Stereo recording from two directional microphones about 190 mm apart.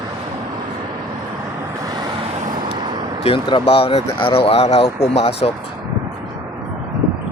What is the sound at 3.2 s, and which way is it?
Speech, 30° left (ahead or behind).